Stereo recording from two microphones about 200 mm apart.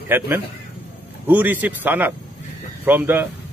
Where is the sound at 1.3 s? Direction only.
10° right (ahead or behind).